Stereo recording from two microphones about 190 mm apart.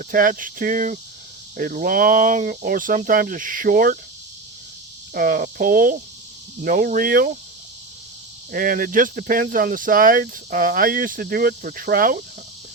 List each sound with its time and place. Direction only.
0.0 s speech: 45° right (ahead or behind)
5.1 s speech: 50° right (ahead or behind)
8.5 s speech: 45° right (ahead or behind)